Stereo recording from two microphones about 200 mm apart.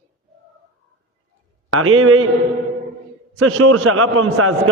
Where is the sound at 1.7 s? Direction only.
90° right.